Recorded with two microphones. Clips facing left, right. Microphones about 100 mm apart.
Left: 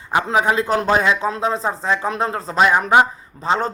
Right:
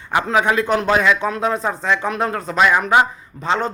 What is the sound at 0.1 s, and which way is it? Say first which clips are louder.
Speech: even; 30° left (ahead or behind).